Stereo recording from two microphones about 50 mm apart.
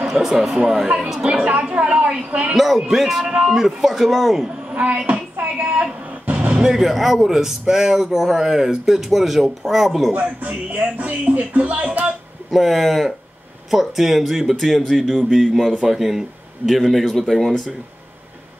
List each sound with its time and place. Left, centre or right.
0.1 s a man's voice: centre
1.2 s a woman's voice: right
2.5 s speech: centre
3.3 s a woman's voice: right
3.5 s speech: centre
4.7 s music: right
6.7 s a man's voice: centre
10.1 s a woman's voice: right
12.4 s speech: centre
16.8 s speech: centre